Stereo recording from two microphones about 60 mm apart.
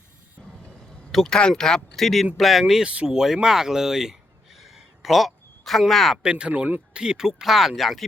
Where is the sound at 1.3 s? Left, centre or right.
Centre.